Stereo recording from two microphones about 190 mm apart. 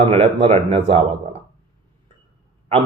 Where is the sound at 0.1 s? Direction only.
30° right (ahead or behind).